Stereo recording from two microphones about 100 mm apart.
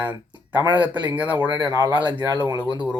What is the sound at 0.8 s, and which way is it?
Speech, 15° right (ahead or behind).